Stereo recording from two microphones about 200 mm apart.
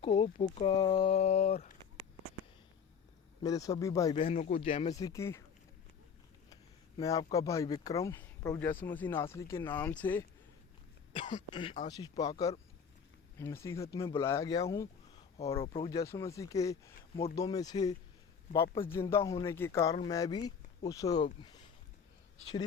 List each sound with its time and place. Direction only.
0.0 s speech: 30° left (ahead or behind)
3.4 s speech: 15° left (ahead or behind)
4.1 s speech: 30° left (ahead or behind)
4.6 s speech: 30° left (ahead or behind)
5.0 s speech: 15° left (ahead or behind)
6.5 s speech: 20° left (ahead or behind)
11.1 s speech: 25° left (ahead or behind)
15.6 s speech: 25° left (ahead or behind)